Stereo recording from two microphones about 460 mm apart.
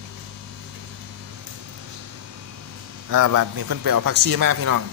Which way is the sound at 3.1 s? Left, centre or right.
Right.